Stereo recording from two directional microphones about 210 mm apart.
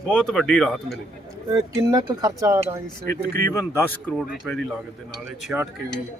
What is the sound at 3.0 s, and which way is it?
Speech, 45° right (ahead or behind).